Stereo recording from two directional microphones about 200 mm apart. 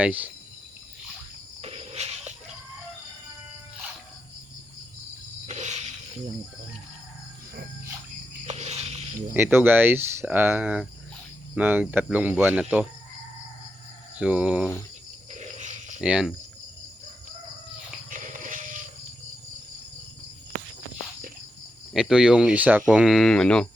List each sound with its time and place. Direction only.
0.0 s speech: 10° right (ahead or behind)
1.6 s a sound: 30° right (ahead or behind)
5.5 s a sound: 35° right (ahead or behind)
8.4 s cricket: 35° right (ahead or behind)
9.3 s speech: 10° right (ahead or behind)
14.2 s speech: 5° right (ahead or behind)
15.3 s wild animals: 35° right (ahead or behind)
16.0 s speech: 5° right (ahead or behind)
18.1 s a sound: 40° right (ahead or behind)
21.9 s speech: 5° right (ahead or behind)